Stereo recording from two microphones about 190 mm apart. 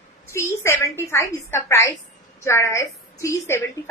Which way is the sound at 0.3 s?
15° left (ahead or behind).